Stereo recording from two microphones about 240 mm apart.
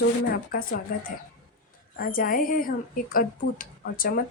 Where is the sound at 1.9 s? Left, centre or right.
Left.